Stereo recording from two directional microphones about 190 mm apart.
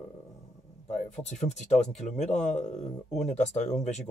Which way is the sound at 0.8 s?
35° left (ahead or behind).